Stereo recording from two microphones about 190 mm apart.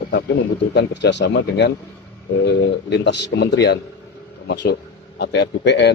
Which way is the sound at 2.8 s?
65° left (ahead or behind).